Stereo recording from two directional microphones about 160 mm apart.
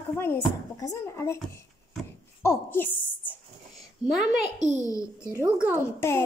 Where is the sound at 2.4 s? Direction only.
15° left (ahead or behind).